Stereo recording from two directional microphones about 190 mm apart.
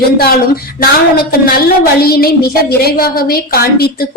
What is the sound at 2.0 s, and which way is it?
A woman's voice, 55° left (ahead or behind).